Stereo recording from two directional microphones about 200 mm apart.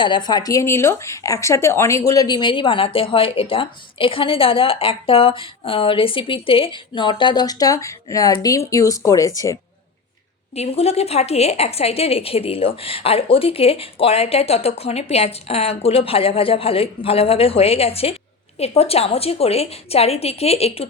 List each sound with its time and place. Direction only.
0.0 s speech: 20° left (ahead or behind)
10.5 s a woman's voice: 30° left (ahead or behind)